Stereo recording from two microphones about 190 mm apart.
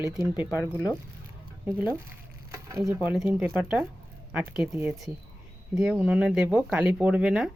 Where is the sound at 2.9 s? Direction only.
Centre (ahead or behind).